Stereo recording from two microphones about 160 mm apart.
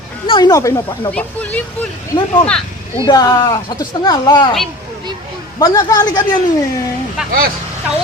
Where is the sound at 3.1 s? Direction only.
25° left (ahead or behind).